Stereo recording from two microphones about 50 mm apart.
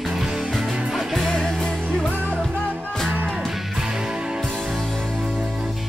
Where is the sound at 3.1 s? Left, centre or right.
Right.